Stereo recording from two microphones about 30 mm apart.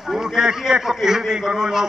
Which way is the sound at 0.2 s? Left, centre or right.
Right.